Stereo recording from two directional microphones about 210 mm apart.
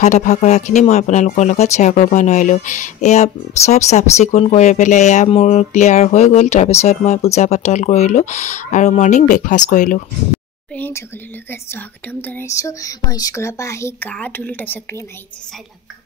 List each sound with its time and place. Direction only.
0.0 s speech: 35° left (ahead or behind)
10.8 s speech: 10° left (ahead or behind)